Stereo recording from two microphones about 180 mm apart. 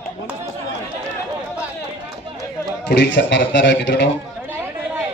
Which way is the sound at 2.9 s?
70° left (ahead or behind).